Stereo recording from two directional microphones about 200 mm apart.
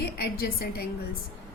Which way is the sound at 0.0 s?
50° left (ahead or behind).